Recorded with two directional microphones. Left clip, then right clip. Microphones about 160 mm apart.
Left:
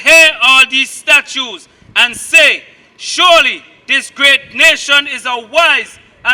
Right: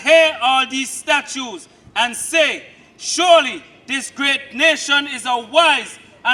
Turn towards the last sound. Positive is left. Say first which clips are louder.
# left 5 dB
turn(degrees=25)  # may be behind; listen again after turning